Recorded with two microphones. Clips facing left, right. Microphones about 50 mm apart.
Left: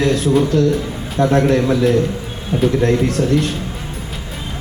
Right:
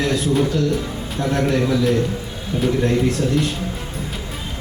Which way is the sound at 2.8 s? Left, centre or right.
Left.